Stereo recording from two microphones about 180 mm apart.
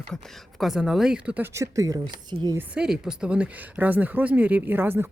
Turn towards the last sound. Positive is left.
turn(degrees=-10)  # may be behind; listen again after turning